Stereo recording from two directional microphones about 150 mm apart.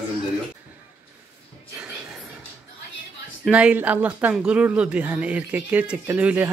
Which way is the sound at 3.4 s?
5° right (ahead or behind).